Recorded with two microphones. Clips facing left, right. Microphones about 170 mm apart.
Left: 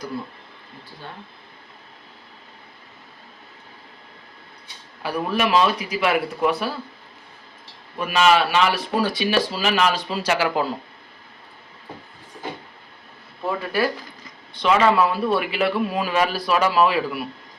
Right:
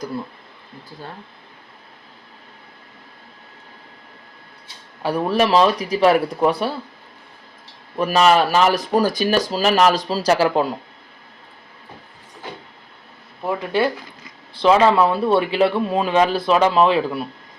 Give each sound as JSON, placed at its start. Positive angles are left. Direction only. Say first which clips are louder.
{"t": 5.0, "sound": "speech", "louder": "right 4 dB", "side_deg": -30}
{"t": 7.9, "sound": "speech", "louder": "right 3 dB", "side_deg": -35}
{"t": 13.6, "sound": "a man's voice", "louder": "right 4 dB", "side_deg": -25}